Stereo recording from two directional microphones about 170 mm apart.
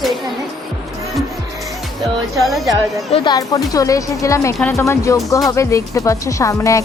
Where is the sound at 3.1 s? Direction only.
25° left (ahead or behind).